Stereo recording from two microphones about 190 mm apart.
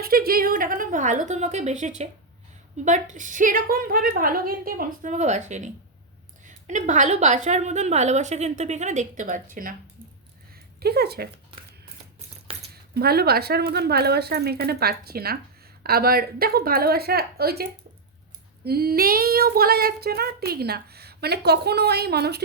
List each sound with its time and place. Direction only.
0.0 s a woman's voice: 50° right (ahead or behind)
10.5 s a sound: 55° right (ahead or behind)
12.9 s child singing: 55° right (ahead or behind)
15.8 s a woman's voice: 55° right (ahead or behind)
18.6 s child singing: 55° right (ahead or behind)